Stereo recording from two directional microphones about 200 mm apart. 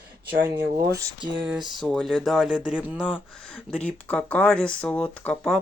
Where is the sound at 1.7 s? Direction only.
5° left (ahead or behind).